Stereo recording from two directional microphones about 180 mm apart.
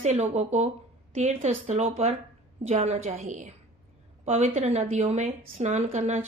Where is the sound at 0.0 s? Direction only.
40° right (ahead or behind).